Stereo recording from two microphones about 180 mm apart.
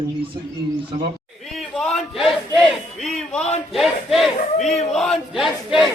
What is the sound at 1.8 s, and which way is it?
Speech, centre (ahead or behind).